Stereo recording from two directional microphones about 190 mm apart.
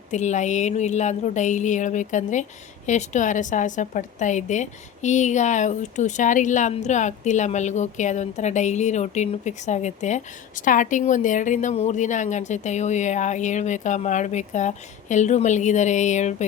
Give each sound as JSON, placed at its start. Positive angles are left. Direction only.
{"t": 0.1, "sound": "speech", "side_deg": 40}